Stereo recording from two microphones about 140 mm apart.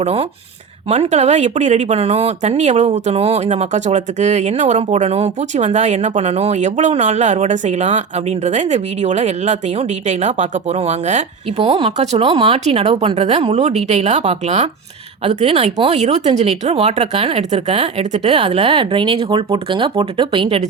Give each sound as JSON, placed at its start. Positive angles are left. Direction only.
{"t": 0.0, "sound": "speech", "side_deg": -45}